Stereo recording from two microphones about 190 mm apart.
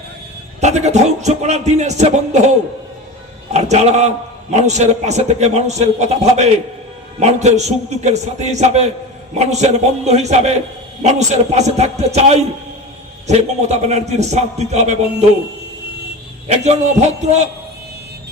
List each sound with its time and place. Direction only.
0.6 s a man's voice: 35° right (ahead or behind)
3.5 s a man's voice: 35° right (ahead or behind)
16.5 s a man's voice: 35° right (ahead or behind)